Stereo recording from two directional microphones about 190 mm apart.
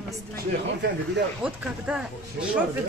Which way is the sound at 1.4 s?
5° right (ahead or behind).